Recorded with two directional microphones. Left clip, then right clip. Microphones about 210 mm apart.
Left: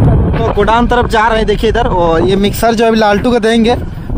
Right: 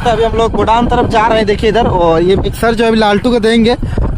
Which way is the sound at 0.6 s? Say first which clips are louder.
Left 3 dB; centre (ahead or behind).